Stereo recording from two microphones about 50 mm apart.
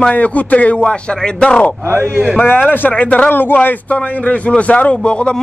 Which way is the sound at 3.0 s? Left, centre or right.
Left.